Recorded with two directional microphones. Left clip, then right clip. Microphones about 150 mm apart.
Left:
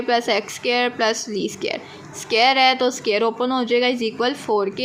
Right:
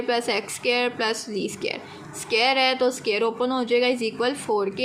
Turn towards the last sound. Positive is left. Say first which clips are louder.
# left 3 dB
turn(degrees=25)  # may be behind; listen again after turning